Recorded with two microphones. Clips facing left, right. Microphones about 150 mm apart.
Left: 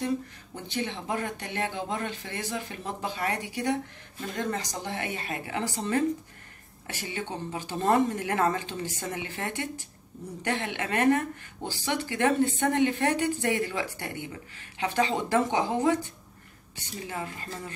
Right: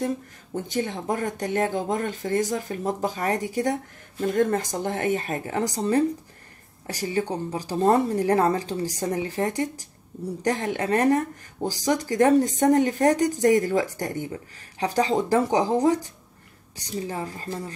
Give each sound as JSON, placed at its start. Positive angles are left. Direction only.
{"t": 0.7, "sound": "speech", "side_deg": -45}